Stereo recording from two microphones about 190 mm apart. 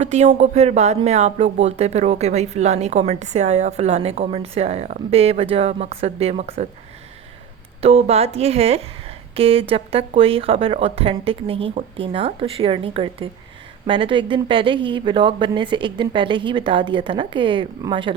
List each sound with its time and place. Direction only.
0.0 s speech: 35° right (ahead or behind)
7.8 s speech: 30° right (ahead or behind)